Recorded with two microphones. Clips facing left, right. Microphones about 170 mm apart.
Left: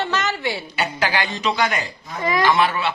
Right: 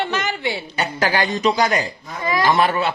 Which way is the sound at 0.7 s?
45° right (ahead or behind).